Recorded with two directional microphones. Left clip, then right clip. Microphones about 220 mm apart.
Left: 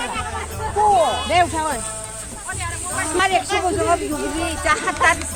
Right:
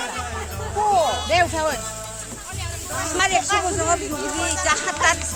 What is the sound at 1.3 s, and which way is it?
Music, 25° right (ahead or behind).